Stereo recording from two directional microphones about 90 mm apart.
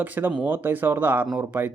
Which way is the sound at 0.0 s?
20° right (ahead or behind).